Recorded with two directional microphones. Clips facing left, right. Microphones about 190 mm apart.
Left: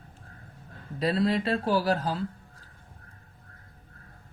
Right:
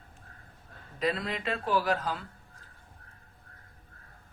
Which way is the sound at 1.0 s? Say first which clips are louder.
Left 6 dB; 35° left (ahead or behind).